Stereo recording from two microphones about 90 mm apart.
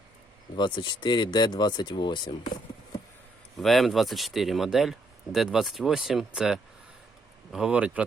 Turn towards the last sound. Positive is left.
turn(degrees=-15)  # may be behind; listen again after turning